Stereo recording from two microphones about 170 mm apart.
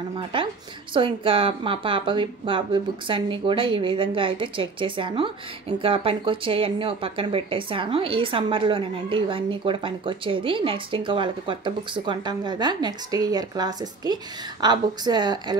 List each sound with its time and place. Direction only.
0.9 s speech: 30° right (ahead or behind)